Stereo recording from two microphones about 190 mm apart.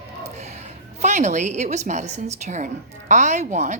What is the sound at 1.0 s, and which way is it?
A woman's voice, 40° right (ahead or behind).